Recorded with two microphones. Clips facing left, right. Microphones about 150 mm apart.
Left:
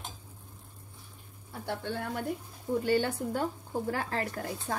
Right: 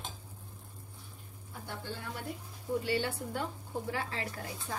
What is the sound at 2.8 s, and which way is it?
Speech, 45° left (ahead or behind).